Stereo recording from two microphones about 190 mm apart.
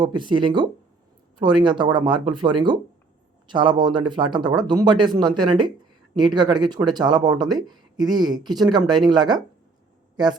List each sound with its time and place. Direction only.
0.0 s speech: 25° right (ahead or behind)